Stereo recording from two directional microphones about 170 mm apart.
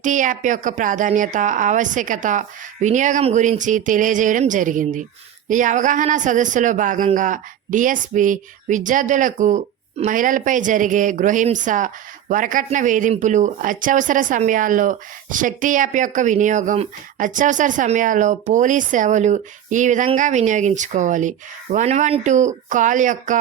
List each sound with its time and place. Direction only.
0.0 s speech: 50° right (ahead or behind)